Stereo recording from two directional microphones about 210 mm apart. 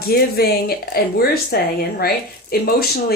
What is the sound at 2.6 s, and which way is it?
Speech, 45° left (ahead or behind).